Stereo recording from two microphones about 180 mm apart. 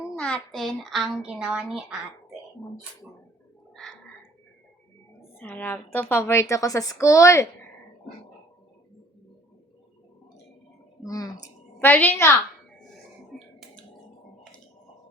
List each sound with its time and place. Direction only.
0.0 s a woman's voice: 10° left (ahead or behind)
3.8 s frog: centre (ahead or behind)
5.4 s a woman's voice: 10° left (ahead or behind)
11.0 s a woman's voice: 20° left (ahead or behind)
13.3 s finger snapping: 5° left (ahead or behind)